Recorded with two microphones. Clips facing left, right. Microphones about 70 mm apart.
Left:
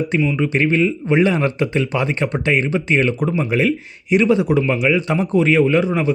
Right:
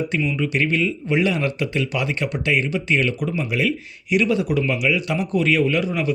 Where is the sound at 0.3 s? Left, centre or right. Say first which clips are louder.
Left 4 dB; left.